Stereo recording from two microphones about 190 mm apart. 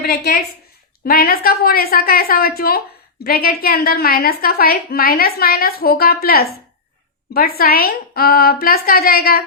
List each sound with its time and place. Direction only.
0.0 s a woman's voice: 55° left (ahead or behind)